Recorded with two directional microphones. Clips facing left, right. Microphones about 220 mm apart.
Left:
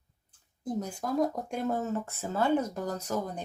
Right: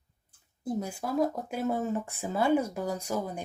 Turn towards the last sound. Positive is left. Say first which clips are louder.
# right 1 dB
turn(degrees=-10)  # may be behind; listen again after turning